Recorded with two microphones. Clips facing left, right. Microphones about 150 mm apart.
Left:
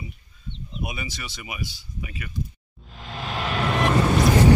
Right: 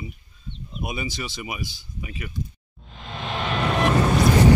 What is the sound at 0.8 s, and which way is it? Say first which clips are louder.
Speech: right 7 dB; 25° right (ahead or behind).